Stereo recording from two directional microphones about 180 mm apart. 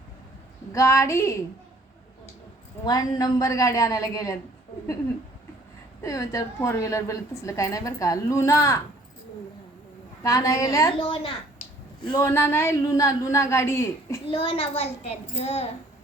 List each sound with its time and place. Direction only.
0.7 s a woman's voice: 15° left (ahead or behind)
2.8 s a woman's voice: 20° left (ahead or behind)
6.0 s a woman's voice: 20° left (ahead or behind)
10.2 s a woman's voice: 20° left (ahead or behind)
11.0 s a child's voice: 30° left (ahead or behind)
12.1 s a woman's voice: 15° left (ahead or behind)
14.3 s a child's voice: 30° left (ahead or behind)